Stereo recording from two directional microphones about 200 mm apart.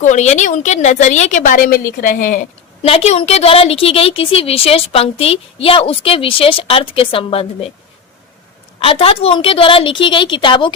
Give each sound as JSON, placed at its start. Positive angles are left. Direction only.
{"t": 0.0, "sound": "a woman's voice", "side_deg": 35}
{"t": 2.8, "sound": "a woman's voice", "side_deg": 30}
{"t": 8.8, "sound": "a woman's voice", "side_deg": 30}